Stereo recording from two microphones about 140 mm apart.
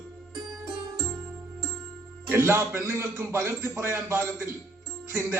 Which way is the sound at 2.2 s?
15° right (ahead or behind).